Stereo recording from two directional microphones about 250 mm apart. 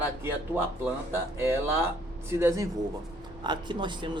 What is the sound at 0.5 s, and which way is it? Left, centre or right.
Speech, centre.